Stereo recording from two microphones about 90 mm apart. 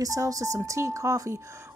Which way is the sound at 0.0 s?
40° right (ahead or behind).